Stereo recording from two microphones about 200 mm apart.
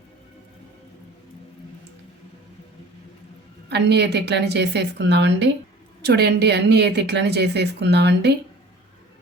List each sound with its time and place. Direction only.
3.7 s speech: 55° right (ahead or behind)